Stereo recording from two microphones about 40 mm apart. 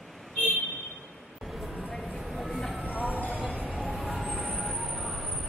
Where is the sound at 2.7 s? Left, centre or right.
Right.